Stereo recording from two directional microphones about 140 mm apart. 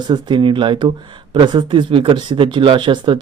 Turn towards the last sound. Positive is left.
turn(degrees=-35)  # may be behind; listen again after turning